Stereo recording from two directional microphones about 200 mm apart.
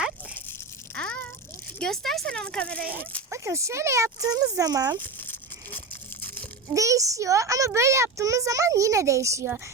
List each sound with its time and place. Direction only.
0.9 s a sound: 5° left (ahead or behind)
1.8 s speech: centre (ahead or behind)
3.2 s speech: 15° right (ahead or behind)
4.9 s crumpling: 10° left (ahead or behind)
6.7 s speech: 15° right (ahead or behind)